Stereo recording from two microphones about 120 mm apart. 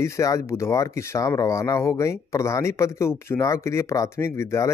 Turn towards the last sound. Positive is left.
turn(degrees=20)  # may be behind; listen again after turning